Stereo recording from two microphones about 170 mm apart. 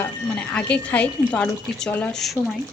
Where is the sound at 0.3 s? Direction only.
5° left (ahead or behind).